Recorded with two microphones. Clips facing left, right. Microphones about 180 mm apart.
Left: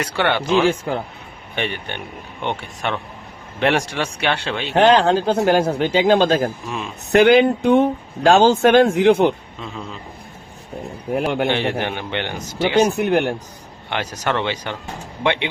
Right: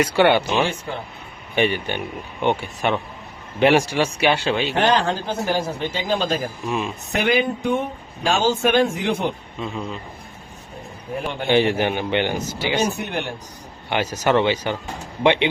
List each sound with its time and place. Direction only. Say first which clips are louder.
0.0 s a man's voice: right 4 dB; 10° right (ahead or behind)
4.7 s speech: left 9 dB; 75° left (ahead or behind)
6.7 s a man's voice: right 4 dB; 5° right (ahead or behind)
7.1 s speech: left 9 dB; 75° left (ahead or behind)
11.1 s speech: left 7 dB; 65° left (ahead or behind)
11.5 s a man's voice: right 4 dB; 10° right (ahead or behind)
12.5 s speech: left 9 dB; 60° left (ahead or behind)
13.9 s a man's voice: right 4 dB; 10° right (ahead or behind)